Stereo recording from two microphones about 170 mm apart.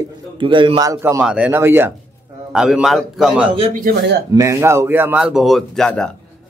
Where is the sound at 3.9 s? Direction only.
60° right (ahead or behind).